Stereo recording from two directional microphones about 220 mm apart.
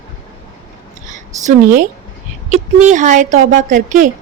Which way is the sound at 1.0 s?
35° right (ahead or behind).